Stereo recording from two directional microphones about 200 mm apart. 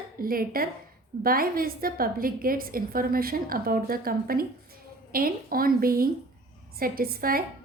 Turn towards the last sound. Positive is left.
turn(degrees=-45)  # may be behind; listen again after turning